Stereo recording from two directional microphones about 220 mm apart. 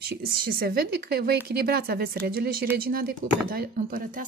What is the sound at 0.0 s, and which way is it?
A woman's voice, 45° right (ahead or behind).